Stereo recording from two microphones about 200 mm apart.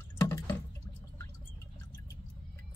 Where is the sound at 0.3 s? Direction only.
10° left (ahead or behind).